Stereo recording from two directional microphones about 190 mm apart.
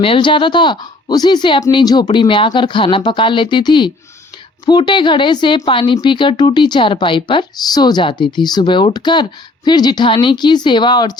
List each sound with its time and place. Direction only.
0.0 s a woman's voice: 25° left (ahead or behind)